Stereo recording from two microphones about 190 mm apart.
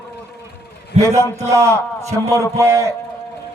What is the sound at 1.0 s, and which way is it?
A man's voice, 15° right (ahead or behind).